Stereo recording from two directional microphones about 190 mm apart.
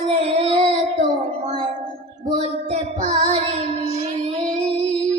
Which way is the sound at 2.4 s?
35° right (ahead or behind).